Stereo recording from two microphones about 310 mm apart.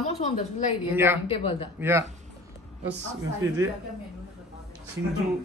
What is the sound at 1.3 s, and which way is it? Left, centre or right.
Speech, centre.